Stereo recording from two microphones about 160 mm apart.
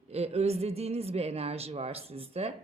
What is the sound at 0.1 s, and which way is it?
A woman's voice, 40° right (ahead or behind).